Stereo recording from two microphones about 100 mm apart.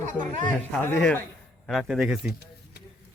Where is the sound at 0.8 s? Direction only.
25° left (ahead or behind).